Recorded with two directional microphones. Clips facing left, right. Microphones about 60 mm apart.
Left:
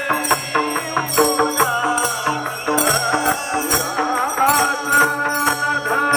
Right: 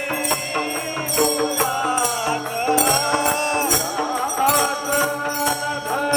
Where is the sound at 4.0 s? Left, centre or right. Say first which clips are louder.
Left 4 dB; left.